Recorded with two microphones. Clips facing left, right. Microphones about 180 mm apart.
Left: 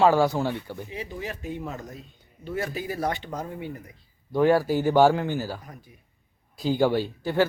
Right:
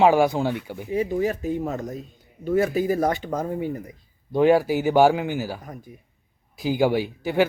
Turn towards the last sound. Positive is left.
turn(degrees=-15)  # may be behind; listen again after turning